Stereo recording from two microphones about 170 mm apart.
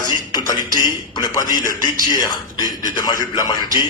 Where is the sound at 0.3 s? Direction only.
25° left (ahead or behind).